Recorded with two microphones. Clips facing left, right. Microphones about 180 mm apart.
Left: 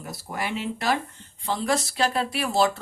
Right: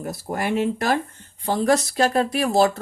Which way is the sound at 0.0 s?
50° right (ahead or behind).